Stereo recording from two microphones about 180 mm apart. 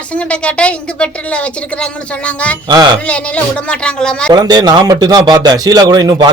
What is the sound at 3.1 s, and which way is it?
A man's voice, 5° left (ahead or behind).